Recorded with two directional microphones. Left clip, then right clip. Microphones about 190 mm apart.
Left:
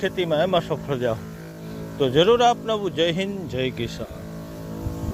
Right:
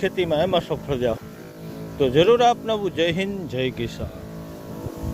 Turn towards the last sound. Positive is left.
turn(degrees=-15)  # may be behind; listen again after turning